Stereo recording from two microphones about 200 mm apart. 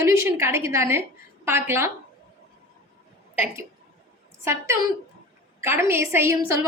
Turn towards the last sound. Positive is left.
turn(degrees=-15)  # may be behind; listen again after turning